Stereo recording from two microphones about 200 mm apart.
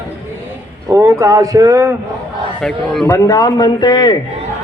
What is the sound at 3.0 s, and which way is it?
Speech, 15° left (ahead or behind).